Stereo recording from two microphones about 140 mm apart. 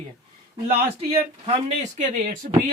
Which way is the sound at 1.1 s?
45° right (ahead or behind).